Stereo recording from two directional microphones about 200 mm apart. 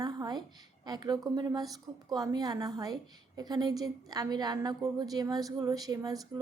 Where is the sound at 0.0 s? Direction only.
20° right (ahead or behind).